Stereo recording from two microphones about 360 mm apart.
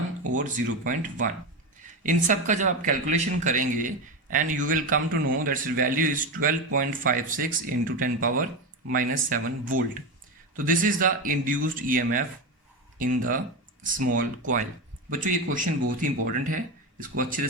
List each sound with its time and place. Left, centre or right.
0.3 s speech: right